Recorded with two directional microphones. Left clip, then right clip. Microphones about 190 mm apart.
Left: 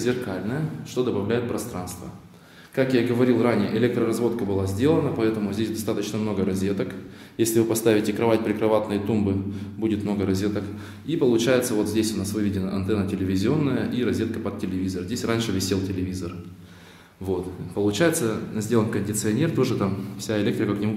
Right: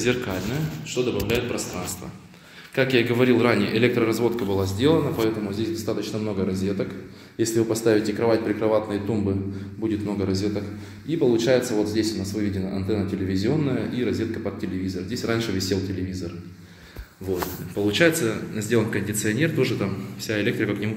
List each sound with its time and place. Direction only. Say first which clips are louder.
0.0 s a man's voice: right 2 dB; centre (ahead or behind)
2.7 s a man's voice: right 1 dB; 5° left (ahead or behind)
17.7 s speech: right 2 dB; 15° left (ahead or behind)